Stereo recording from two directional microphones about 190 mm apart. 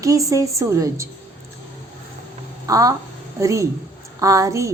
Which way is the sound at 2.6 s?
20° right (ahead or behind).